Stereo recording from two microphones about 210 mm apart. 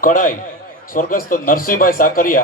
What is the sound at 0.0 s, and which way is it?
A man's voice, 40° left (ahead or behind).